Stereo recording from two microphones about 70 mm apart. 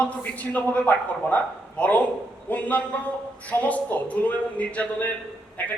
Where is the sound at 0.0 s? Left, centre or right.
Left.